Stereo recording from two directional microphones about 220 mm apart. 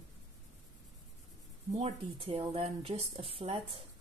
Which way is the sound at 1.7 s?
30° right (ahead or behind).